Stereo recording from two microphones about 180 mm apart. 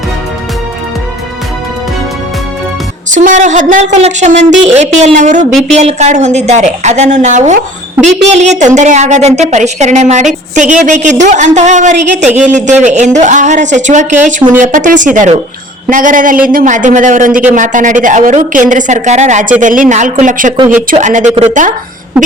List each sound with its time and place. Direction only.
3.2 s a woman's voice: 45° right (ahead or behind)